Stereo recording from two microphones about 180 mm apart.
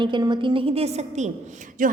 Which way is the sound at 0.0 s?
25° right (ahead or behind).